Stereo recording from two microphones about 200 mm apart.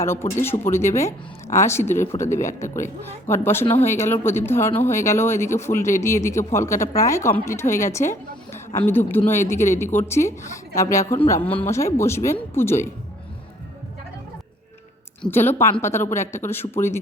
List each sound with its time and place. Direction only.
0.0 s speech: 15° left (ahead or behind)
15.2 s speech: 10° left (ahead or behind)